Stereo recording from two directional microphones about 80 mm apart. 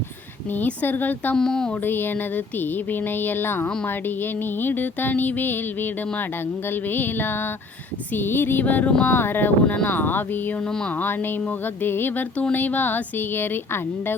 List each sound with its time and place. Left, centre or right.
0.5 s speech: left
1.4 s speech: centre
1.8 s speech: left
9.0 s speech: left
10.7 s speech: centre
10.9 s speech: left